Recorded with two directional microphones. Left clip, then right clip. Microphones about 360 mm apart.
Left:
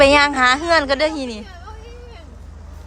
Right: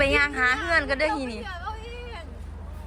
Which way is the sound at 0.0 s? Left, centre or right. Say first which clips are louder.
Left 9 dB; centre.